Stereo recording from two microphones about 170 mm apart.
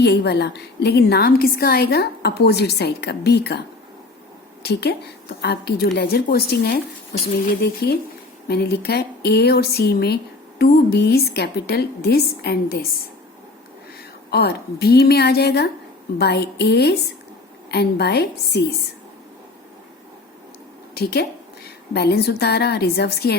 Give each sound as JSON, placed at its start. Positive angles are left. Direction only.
{"t": 0.0, "sound": "a woman's voice", "side_deg": 75}
{"t": 4.6, "sound": "a woman's voice", "side_deg": 75}
{"t": 14.3, "sound": "a woman's voice", "side_deg": 70}
{"t": 20.9, "sound": "a woman's voice", "side_deg": 70}